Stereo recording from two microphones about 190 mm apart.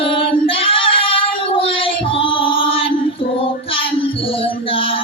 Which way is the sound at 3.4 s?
30° left (ahead or behind).